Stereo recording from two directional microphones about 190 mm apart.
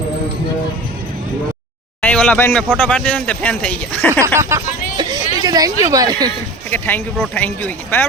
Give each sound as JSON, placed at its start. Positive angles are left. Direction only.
{"t": 2.0, "sound": "a sound", "side_deg": 5}
{"t": 2.7, "sound": "speech", "side_deg": 10}
{"t": 4.4, "sound": "speech", "side_deg": -15}
{"t": 4.9, "sound": "a sound", "side_deg": -20}
{"t": 5.8, "sound": "speech", "side_deg": -20}
{"t": 6.7, "sound": "speech", "side_deg": 10}